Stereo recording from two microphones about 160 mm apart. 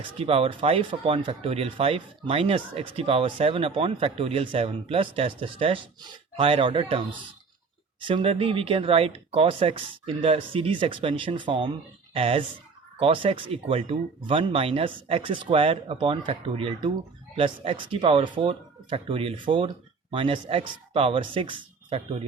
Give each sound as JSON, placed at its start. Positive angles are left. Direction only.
{"t": 0.0, "sound": "speech", "side_deg": -35}
{"t": 8.0, "sound": "speech", "side_deg": -35}